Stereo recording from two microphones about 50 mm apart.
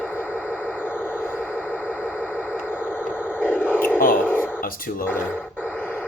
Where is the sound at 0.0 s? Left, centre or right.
Left.